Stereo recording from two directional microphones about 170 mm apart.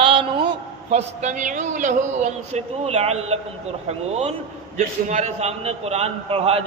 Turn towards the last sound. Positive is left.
turn(degrees=-35)  # may be behind; listen again after turning